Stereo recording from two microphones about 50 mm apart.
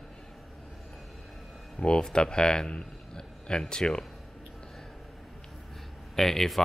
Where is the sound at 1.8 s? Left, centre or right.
Centre.